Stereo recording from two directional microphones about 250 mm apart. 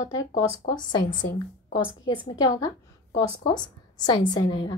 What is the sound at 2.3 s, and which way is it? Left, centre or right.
A woman's voice, centre.